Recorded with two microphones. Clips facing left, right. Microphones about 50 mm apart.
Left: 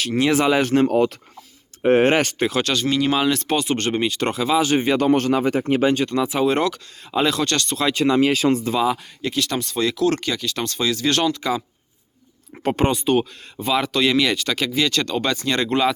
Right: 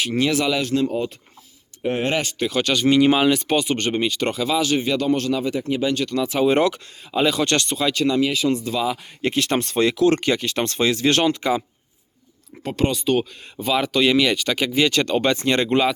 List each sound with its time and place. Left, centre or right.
0.2 s speech: centre
0.6 s speech: left
0.9 s speech: left
1.8 s speech: left
2.8 s speech: centre; by 5.9 s left
5.9 s speech: left
6.4 s speech: centre
7.4 s speech: centre
7.9 s speech: left
8.2 s speech: left
9.2 s speech: right
12.6 s speech: left
12.9 s speech: centre
13.6 s speech: centre; by 15.8 s right